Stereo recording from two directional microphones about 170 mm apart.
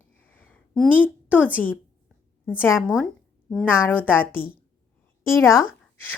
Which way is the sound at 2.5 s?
10° left (ahead or behind).